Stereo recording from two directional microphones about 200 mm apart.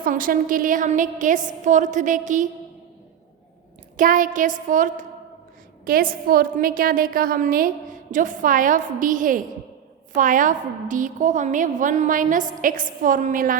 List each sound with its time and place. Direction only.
0.0 s a woman's voice: 45° right (ahead or behind)
3.9 s a woman's voice: 40° right (ahead or behind)